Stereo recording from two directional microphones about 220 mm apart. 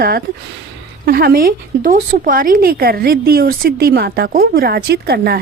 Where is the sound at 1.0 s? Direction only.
45° right (ahead or behind).